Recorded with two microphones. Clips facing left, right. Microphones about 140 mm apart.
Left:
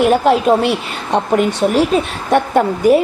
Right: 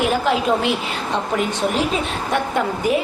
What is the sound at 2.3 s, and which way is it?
Speech, 45° left (ahead or behind).